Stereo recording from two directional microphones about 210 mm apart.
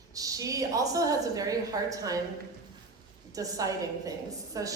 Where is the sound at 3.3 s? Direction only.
15° right (ahead or behind).